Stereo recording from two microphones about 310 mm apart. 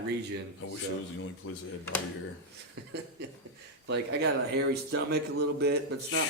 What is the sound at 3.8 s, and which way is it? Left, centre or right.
A man's voice, right.